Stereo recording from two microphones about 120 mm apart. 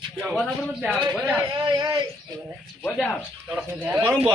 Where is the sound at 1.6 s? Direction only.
40° right (ahead or behind).